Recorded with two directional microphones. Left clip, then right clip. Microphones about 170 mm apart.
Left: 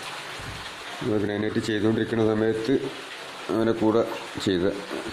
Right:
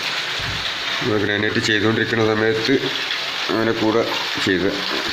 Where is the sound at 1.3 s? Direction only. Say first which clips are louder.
Right 8 dB; 35° left (ahead or behind).